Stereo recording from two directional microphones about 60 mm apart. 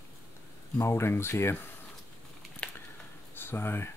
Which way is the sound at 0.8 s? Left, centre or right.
Left.